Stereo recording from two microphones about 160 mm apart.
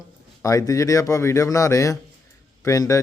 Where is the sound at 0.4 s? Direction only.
20° left (ahead or behind).